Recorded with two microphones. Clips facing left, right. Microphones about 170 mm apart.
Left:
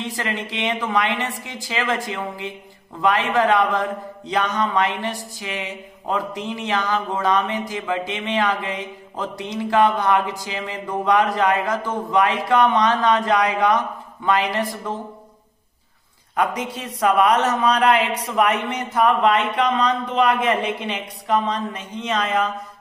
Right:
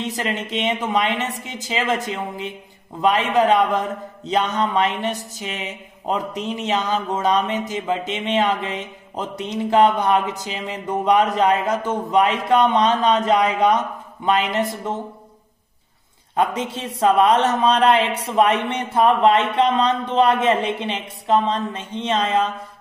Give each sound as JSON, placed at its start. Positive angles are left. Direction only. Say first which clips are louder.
{"t": 0.0, "sound": "speech", "louder": "right 2 dB", "side_deg": -20}
{"t": 16.3, "sound": "speech", "louder": "right 2 dB", "side_deg": -25}